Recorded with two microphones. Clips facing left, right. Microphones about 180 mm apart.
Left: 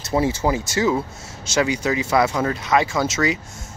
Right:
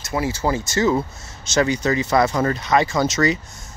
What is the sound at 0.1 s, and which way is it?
Speech, 25° left (ahead or behind).